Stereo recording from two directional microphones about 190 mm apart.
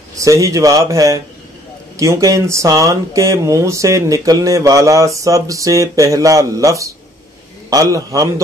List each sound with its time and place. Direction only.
0.1 s speech: 15° right (ahead or behind)